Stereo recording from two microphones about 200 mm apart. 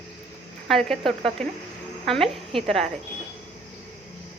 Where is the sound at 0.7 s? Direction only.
Centre (ahead or behind).